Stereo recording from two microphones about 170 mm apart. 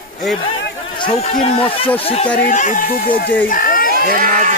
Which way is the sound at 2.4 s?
45° left (ahead or behind).